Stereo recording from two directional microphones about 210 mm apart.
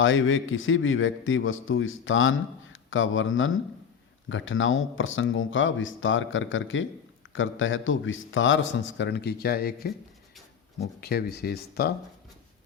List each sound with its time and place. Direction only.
0.0 s a man's voice: 65° left (ahead or behind); by 9.9 s 45° left (ahead or behind)
11.0 s speech: 50° left (ahead or behind)